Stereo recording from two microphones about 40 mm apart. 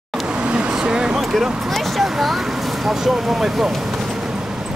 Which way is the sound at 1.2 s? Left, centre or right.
Centre.